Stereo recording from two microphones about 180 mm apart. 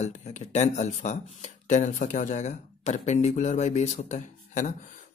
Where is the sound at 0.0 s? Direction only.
40° left (ahead or behind).